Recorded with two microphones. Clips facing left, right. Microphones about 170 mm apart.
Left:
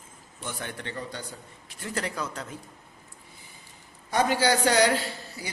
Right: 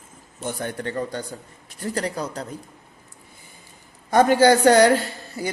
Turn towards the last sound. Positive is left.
turn(degrees=-50)  # may be behind; listen again after turning